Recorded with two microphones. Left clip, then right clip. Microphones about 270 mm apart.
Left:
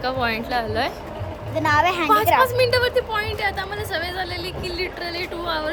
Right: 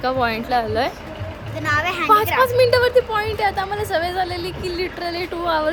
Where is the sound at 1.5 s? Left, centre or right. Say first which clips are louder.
Left 2 dB; left.